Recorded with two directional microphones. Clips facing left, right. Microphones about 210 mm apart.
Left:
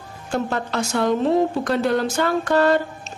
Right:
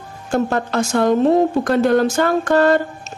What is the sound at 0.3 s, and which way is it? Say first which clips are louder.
Speech: right 5 dB; 45° right (ahead or behind).